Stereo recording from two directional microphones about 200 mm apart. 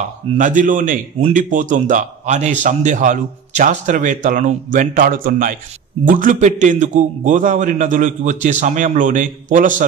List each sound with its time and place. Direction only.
0.3 s speech: 40° right (ahead or behind)